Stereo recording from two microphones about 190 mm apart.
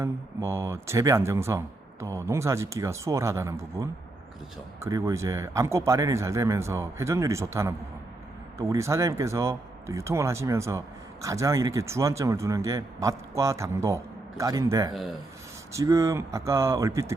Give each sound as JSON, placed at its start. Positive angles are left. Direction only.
{"t": 0.0, "sound": "speech", "side_deg": -15}